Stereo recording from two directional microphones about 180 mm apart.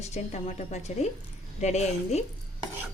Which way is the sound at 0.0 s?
40° left (ahead or behind).